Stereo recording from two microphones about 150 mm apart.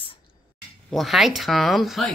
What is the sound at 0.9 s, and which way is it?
Speech, centre (ahead or behind).